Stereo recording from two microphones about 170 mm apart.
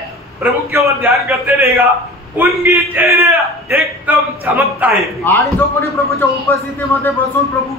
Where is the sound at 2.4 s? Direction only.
15° right (ahead or behind).